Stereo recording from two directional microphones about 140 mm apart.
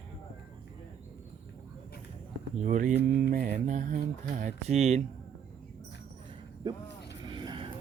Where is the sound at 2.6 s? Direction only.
65° right (ahead or behind).